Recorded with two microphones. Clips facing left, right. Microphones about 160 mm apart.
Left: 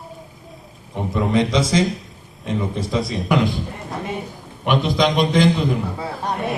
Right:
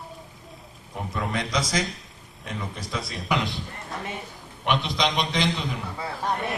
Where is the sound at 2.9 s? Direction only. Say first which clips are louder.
Left 10 dB; centre (ahead or behind).